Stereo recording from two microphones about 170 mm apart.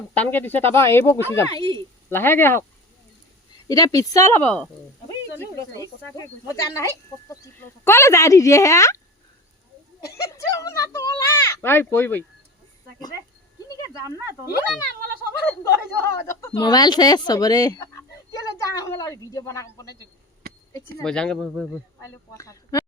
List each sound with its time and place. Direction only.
0.1 s speech: 10° left (ahead or behind)
3.7 s speech: 20° left (ahead or behind)
5.4 s speech: 20° left (ahead or behind)
10.0 s speech: 20° left (ahead or behind)
15.4 s speech: 15° left (ahead or behind)
16.6 s speech: 25° left (ahead or behind)
21.0 s speech: 5° left (ahead or behind)
22.0 s speech: 20° left (ahead or behind)